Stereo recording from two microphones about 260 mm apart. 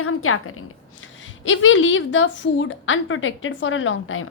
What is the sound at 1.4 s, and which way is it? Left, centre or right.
A woman's voice, left.